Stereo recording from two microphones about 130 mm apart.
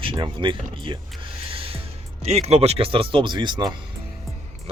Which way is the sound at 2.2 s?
55° right (ahead or behind).